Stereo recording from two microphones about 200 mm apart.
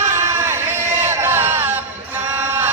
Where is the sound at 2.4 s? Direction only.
10° right (ahead or behind).